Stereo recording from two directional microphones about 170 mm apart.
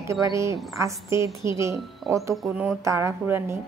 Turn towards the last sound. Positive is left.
turn(degrees=-15)  # may be behind; listen again after turning